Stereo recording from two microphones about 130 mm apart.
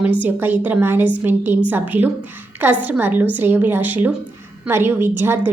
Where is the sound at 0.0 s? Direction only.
10° right (ahead or behind).